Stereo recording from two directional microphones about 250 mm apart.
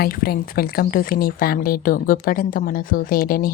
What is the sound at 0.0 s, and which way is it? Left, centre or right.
Speech, left.